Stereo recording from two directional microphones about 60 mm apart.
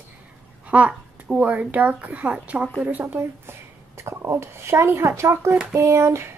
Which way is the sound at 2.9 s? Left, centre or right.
Right.